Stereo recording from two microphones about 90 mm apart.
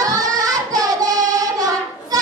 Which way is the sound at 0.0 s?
40° right (ahead or behind).